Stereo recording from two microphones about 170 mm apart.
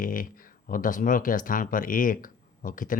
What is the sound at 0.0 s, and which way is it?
Speech, 55° left (ahead or behind).